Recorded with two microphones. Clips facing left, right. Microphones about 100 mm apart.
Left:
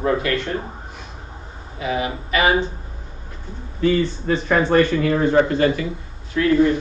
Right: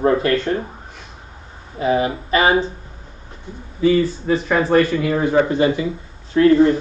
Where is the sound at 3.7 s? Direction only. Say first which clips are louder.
Right 3 dB; 5° right (ahead or behind).